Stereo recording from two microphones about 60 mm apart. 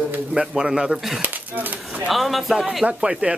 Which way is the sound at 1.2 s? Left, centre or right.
Right.